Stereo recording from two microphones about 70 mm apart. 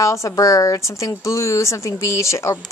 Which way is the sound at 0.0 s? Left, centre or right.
Left.